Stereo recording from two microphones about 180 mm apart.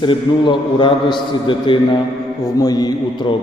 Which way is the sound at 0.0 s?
25° left (ahead or behind).